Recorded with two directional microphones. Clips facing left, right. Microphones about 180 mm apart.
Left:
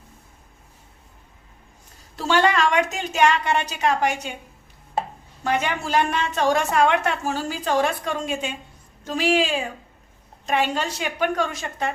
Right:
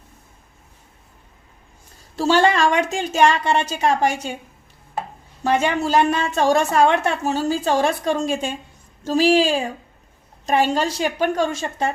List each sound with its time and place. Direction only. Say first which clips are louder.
2.1 s a woman's voice: right 3 dB; 30° right (ahead or behind)
5.4 s a woman's voice: right 5 dB; 30° right (ahead or behind)